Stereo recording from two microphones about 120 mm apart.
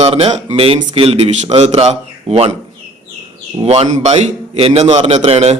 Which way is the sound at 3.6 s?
65° right (ahead or behind).